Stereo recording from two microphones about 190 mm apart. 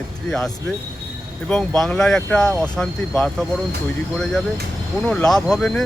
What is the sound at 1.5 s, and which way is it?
Speech, 5° left (ahead or behind).